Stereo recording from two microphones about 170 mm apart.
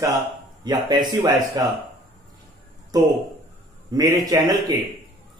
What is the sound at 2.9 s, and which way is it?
A man's voice, 20° right (ahead or behind).